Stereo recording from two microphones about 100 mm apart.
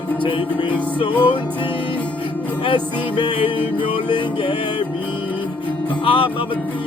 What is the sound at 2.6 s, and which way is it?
Music, 50° left (ahead or behind).